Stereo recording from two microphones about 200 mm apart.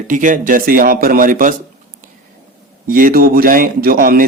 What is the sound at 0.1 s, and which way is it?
A man's voice, 40° right (ahead or behind).